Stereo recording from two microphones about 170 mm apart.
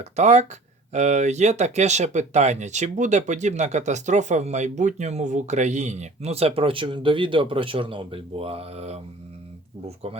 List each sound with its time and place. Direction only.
0.0 s speech: 45° right (ahead or behind)